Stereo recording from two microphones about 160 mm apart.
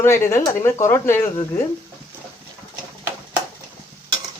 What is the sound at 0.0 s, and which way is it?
Speech, 15° left (ahead or behind).